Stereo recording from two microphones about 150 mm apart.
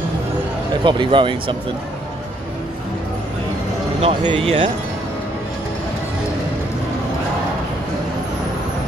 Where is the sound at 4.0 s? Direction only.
40° right (ahead or behind).